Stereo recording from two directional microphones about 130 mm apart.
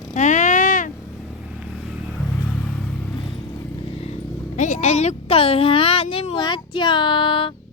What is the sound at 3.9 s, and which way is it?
Speech, 50° left (ahead or behind).